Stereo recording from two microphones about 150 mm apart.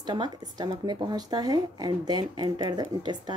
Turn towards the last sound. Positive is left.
turn(degrees=-30)  # may be behind; listen again after turning